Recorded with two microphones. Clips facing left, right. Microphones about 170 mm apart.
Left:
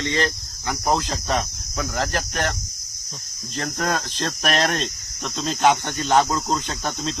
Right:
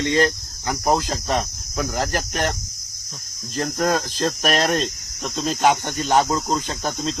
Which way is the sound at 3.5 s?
Centre (ahead or behind).